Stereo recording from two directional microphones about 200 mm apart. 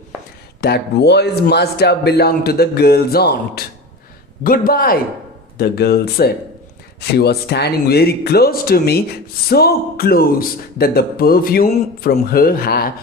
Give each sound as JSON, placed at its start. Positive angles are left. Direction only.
{"t": 0.6, "sound": "speech", "side_deg": 55}